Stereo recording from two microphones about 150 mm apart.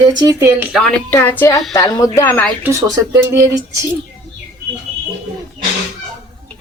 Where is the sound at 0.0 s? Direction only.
25° right (ahead or behind).